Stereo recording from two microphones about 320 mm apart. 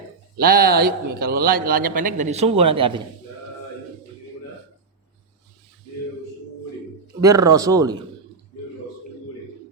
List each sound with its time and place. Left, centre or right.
0.3 s a man's voice: right
7.2 s speech: centre